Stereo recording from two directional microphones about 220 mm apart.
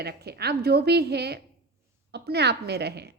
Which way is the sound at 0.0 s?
45° right (ahead or behind).